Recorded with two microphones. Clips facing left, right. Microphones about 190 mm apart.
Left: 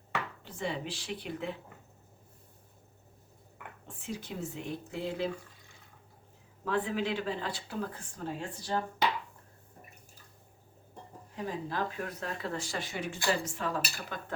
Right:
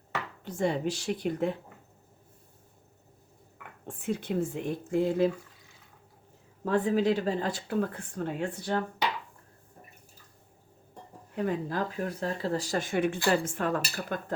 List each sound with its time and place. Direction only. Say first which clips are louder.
0.4 s speech: right 12 dB; 45° right (ahead or behind)
3.8 s speech: right 9 dB; 55° right (ahead or behind)
6.7 s speech: right 6 dB; 45° right (ahead or behind); by 8.8 s 60° right (ahead or behind)
11.3 s speech: right 6 dB; 60° right (ahead or behind)
11.8 s speech: right 4 dB; 30° right (ahead or behind); by 14.2 s 55° right (ahead or behind)